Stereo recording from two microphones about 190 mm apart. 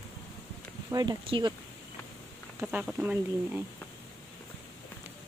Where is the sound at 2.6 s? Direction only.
10° right (ahead or behind).